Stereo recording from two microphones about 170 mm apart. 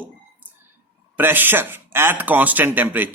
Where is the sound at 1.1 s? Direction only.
10° right (ahead or behind).